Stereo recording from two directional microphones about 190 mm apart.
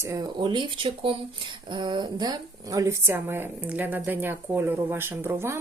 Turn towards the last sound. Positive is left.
turn(degrees=-15)  # may be behind; listen again after turning